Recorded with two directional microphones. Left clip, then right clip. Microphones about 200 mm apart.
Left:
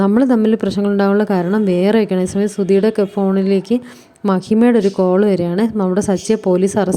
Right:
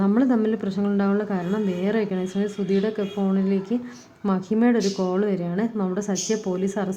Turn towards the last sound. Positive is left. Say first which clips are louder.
# left 11 dB
turn(degrees=30)  # may be behind; listen again after turning